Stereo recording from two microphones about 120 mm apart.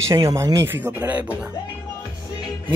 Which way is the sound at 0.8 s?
15° right (ahead or behind).